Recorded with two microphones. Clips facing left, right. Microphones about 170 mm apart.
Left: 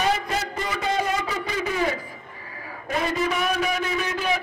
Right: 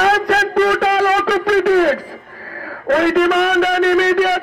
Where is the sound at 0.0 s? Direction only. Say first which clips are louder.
Right 9 dB; 70° right (ahead or behind).